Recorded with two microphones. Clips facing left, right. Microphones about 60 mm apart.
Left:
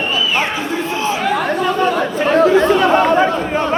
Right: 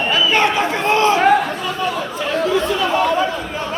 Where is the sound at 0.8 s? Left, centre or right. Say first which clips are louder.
Right 5 dB; right.